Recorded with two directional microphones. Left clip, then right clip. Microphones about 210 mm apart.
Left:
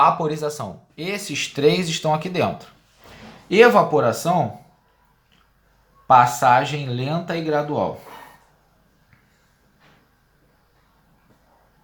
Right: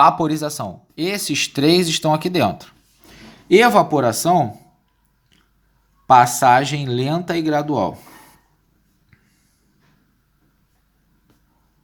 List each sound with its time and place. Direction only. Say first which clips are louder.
0.0 s speech: right 3 dB; 40° right (ahead or behind)
6.1 s speech: right 2 dB; 45° right (ahead or behind)